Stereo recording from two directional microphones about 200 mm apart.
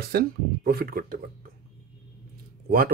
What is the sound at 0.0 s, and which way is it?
Speech, 50° right (ahead or behind).